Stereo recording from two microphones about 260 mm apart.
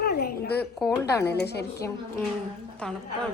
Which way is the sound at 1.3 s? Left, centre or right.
Left.